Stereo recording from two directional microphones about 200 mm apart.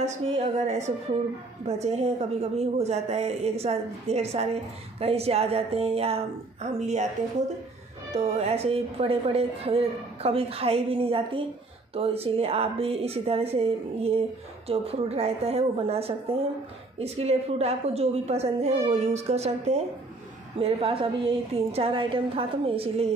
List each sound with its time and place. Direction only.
0.0 s a woman's voice: 35° right (ahead or behind)
8.1 s a woman's voice: 30° right (ahead or behind)